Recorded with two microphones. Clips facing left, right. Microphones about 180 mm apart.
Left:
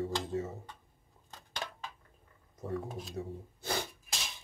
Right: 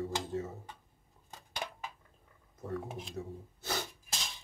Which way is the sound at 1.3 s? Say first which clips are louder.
Right 1 dB; 10° right (ahead or behind).